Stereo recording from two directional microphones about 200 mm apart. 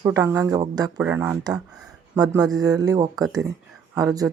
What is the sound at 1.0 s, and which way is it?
Speech, 5° right (ahead or behind).